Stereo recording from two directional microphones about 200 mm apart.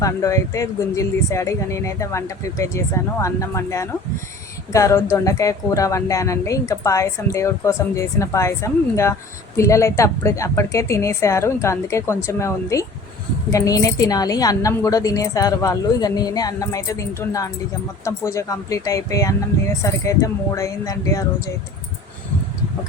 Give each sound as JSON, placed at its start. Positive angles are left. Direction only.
{"t": 0.0, "sound": "a woman's voice", "side_deg": 15}